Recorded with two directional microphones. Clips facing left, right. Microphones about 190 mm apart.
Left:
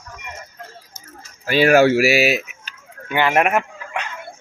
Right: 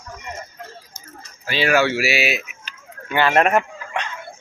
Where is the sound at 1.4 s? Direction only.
45° left (ahead or behind).